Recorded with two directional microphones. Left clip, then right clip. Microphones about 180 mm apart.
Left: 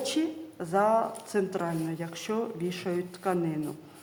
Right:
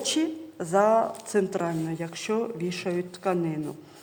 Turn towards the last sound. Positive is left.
turn(degrees=-25)  # may be behind; listen again after turning